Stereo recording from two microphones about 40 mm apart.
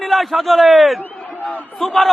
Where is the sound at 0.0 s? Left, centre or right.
Centre.